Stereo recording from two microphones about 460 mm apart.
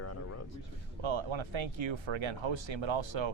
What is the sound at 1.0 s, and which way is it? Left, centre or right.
Speech, right.